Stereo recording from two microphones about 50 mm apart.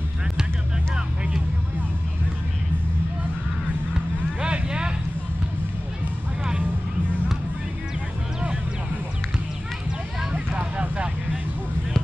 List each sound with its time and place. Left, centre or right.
0.9 s vehicle: centre
4.4 s vehicle: centre
10.3 s a sound: right